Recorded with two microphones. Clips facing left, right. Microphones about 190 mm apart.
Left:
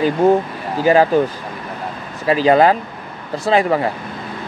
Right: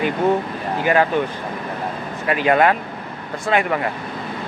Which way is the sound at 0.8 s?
35° left (ahead or behind).